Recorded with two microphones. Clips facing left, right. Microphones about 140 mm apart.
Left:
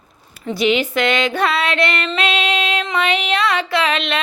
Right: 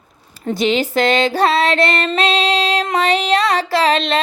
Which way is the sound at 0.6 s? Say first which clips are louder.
Right 1 dB; 35° right (ahead or behind).